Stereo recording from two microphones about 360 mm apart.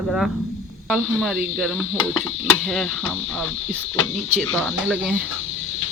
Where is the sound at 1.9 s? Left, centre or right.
Left.